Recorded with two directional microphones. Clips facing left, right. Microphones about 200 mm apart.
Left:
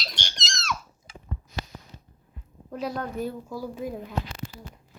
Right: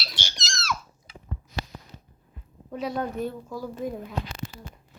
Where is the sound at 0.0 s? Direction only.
5° right (ahead or behind).